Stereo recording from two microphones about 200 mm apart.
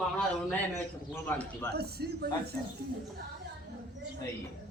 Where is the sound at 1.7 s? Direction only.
55° right (ahead or behind).